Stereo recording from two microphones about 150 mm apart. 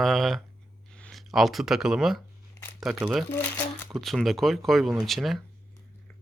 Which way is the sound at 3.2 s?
10° left (ahead or behind).